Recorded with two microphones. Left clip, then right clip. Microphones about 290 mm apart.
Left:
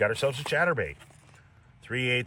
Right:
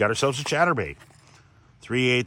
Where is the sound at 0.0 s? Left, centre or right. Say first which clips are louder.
Right 3 dB; right.